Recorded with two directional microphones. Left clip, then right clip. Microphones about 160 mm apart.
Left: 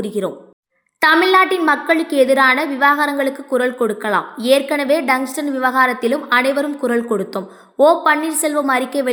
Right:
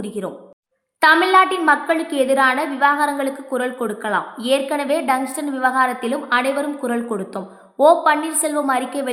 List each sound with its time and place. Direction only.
0.0 s a woman's voice: 20° left (ahead or behind)